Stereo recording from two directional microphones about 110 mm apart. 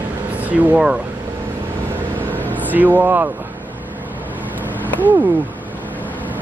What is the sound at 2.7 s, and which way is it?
Speech, 15° right (ahead or behind).